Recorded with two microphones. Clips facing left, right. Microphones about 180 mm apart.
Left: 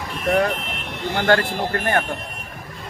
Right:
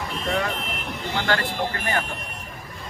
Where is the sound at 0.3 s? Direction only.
45° left (ahead or behind).